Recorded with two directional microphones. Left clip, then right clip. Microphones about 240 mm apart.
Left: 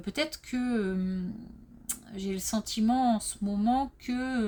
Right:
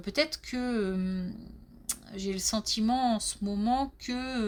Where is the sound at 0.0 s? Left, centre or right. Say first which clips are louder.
Right 3 dB; right.